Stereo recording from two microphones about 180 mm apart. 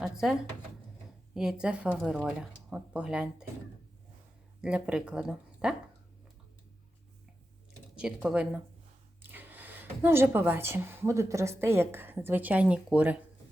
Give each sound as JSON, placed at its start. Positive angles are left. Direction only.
{"t": 0.0, "sound": "speech", "side_deg": 0}
{"t": 4.6, "sound": "speech", "side_deg": -5}
{"t": 7.9, "sound": "speech", "side_deg": -5}